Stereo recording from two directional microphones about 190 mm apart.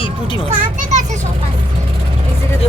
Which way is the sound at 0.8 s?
40° right (ahead or behind).